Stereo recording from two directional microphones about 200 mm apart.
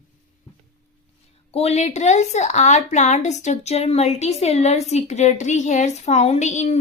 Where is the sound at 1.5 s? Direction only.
30° left (ahead or behind).